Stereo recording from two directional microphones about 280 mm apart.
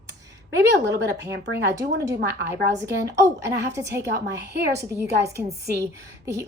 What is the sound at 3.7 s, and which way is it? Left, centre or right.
A woman's voice, centre.